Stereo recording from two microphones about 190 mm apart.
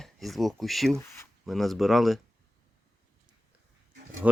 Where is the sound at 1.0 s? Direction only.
15° left (ahead or behind).